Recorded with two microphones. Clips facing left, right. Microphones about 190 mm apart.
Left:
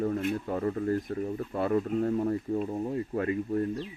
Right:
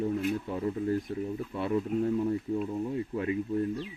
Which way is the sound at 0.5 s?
50° left (ahead or behind).